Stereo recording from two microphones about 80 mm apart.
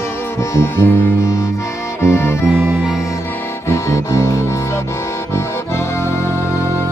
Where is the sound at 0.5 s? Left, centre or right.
Left.